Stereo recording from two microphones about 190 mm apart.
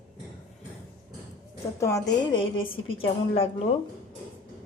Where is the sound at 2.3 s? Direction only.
25° left (ahead or behind).